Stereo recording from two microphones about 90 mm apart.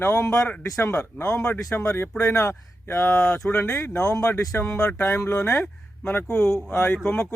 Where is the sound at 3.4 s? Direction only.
15° left (ahead or behind).